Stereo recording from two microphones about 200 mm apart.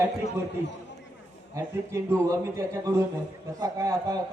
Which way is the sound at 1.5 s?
15° right (ahead or behind).